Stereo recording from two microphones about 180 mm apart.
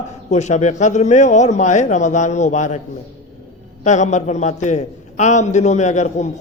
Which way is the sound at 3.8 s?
40° left (ahead or behind).